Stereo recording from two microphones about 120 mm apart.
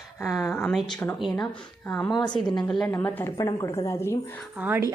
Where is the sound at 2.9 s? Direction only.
20° left (ahead or behind).